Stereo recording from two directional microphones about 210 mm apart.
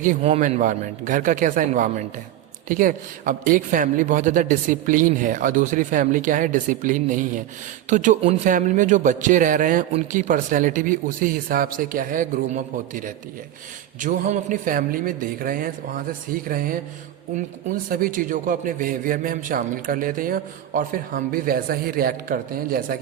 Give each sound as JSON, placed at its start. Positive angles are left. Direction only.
{"t": 0.0, "sound": "a man's voice", "side_deg": -35}
{"t": 17.8, "sound": "a man's voice", "side_deg": -40}